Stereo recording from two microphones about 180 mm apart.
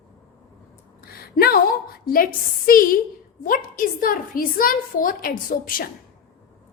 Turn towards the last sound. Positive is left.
turn(degrees=50)  # may be behind; listen again after turning